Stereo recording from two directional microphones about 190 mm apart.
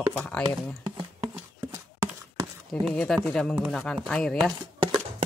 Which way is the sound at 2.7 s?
5° left (ahead or behind).